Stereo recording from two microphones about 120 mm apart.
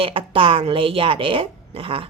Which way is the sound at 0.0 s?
50° right (ahead or behind).